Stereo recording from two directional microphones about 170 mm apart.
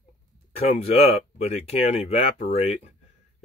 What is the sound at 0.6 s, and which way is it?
Speech, 35° left (ahead or behind).